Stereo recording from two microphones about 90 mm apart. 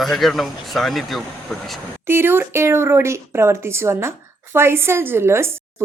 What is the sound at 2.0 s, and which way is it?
A woman's voice, 25° right (ahead or behind).